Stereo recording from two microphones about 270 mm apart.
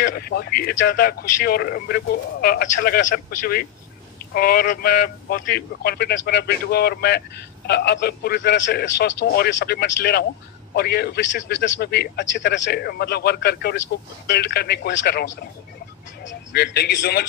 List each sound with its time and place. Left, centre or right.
0.0 s speech: left
16.3 s speech: left